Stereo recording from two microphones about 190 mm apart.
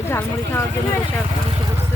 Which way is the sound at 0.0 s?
15° left (ahead or behind).